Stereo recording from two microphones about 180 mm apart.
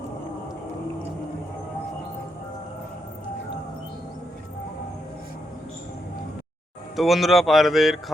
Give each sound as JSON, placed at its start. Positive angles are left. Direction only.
{"t": 6.9, "sound": "speech", "side_deg": 0}